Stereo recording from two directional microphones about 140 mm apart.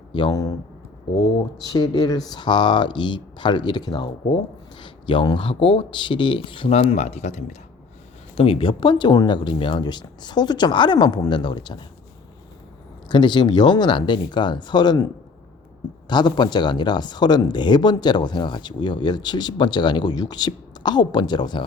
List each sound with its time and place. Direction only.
0.1 s speech: 35° left (ahead or behind)
1.6 s speech: 30° left (ahead or behind); by 7.4 s 55° left (ahead or behind)
8.4 s speech: 40° left (ahead or behind)
13.1 s speech: 35° left (ahead or behind)